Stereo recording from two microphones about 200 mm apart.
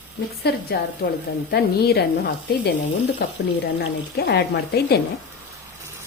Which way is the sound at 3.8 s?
55° left (ahead or behind).